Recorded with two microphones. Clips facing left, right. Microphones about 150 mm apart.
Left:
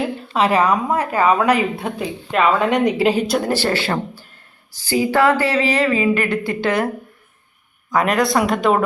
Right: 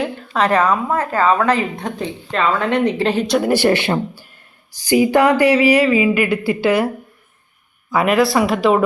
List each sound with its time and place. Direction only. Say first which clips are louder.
0.3 s speech: right 1 dB; 10° left (ahead or behind)
3.4 s speech: right 4 dB; 15° right (ahead or behind)
7.9 s speech: right 2 dB; 5° right (ahead or behind)